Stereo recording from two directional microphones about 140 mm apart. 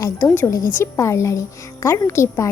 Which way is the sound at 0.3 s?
20° left (ahead or behind).